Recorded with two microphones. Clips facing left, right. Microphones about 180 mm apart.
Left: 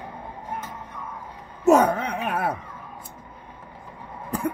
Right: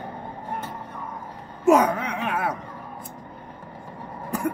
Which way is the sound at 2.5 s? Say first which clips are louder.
Right 3 dB; 40° right (ahead or behind).